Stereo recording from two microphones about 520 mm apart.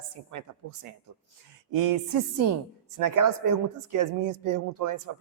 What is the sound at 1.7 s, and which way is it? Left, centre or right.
Music, right.